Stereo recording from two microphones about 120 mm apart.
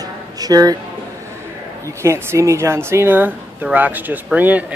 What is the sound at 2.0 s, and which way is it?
Speech, 25° right (ahead or behind).